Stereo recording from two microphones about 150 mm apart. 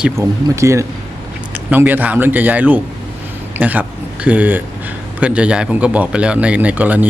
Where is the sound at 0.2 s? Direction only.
20° right (ahead or behind).